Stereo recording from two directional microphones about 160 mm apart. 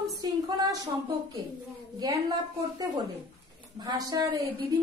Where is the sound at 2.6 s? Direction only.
25° right (ahead or behind).